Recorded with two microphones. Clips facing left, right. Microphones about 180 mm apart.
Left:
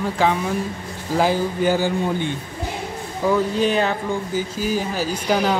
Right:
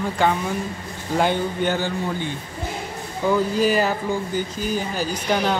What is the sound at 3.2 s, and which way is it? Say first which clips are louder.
Speech: even; centre (ahead or behind).